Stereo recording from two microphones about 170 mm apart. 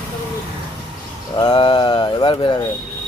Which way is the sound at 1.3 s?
30° left (ahead or behind).